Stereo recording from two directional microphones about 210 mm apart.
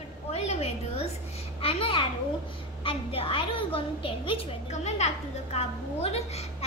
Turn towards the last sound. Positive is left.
turn(degrees=30)  # may be behind; listen again after turning